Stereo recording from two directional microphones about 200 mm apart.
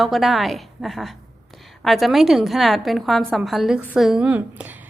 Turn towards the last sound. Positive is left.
turn(degrees=-10)  # may be behind; listen again after turning